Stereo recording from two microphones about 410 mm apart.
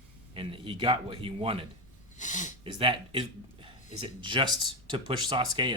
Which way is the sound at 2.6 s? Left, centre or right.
Centre.